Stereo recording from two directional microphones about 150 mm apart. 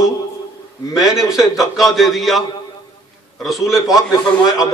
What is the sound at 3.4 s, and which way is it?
A man's voice, centre (ahead or behind).